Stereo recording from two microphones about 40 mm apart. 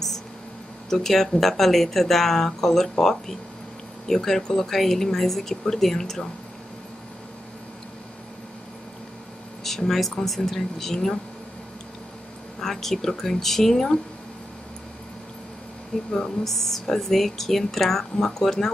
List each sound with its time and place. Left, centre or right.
0.8 s speech: centre
9.8 s speech: centre
12.5 s speech: centre
16.4 s speech: centre